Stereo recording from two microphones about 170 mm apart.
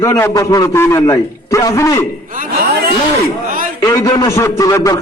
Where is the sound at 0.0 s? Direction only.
15° left (ahead or behind).